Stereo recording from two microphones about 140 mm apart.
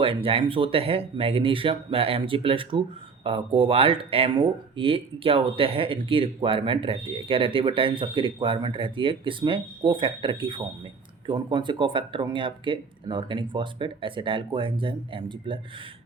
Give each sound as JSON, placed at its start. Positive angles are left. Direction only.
{"t": 0.0, "sound": "speech", "side_deg": -40}